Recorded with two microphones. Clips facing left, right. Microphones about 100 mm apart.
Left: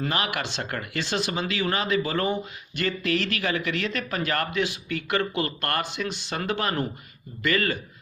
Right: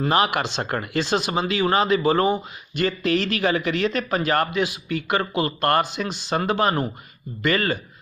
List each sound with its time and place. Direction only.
0.0 s a man's voice: 30° right (ahead or behind)